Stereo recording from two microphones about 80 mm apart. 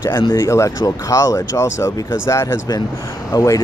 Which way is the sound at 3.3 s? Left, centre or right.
Left.